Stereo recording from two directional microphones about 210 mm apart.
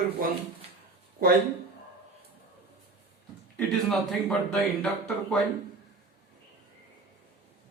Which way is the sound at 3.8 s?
Centre (ahead or behind).